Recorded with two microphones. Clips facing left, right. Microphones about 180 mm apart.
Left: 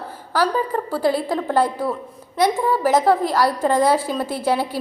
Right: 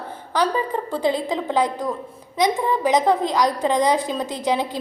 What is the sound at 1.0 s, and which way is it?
Speech, 20° right (ahead or behind).